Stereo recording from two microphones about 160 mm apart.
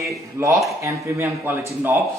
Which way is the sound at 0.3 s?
20° right (ahead or behind).